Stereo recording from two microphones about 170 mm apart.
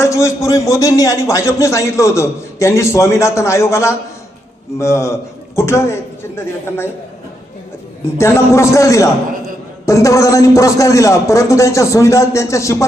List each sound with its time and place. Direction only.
0.0 s a man's voice: 15° left (ahead or behind)
8.0 s a man's voice: 15° left (ahead or behind)